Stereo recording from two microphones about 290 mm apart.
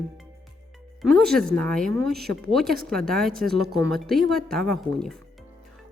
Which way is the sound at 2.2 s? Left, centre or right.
Right.